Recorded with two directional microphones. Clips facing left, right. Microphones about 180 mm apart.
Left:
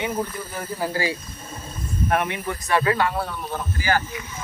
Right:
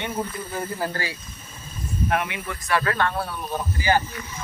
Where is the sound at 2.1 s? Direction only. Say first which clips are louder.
Left 4 dB; 40° left (ahead or behind).